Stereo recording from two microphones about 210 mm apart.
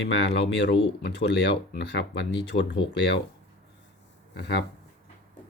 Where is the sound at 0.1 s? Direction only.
55° left (ahead or behind).